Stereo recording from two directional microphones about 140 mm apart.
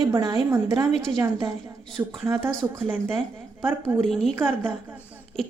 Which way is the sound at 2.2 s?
20° right (ahead or behind).